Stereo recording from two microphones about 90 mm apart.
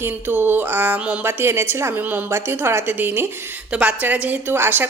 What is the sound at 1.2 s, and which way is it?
A woman's voice, 25° right (ahead or behind).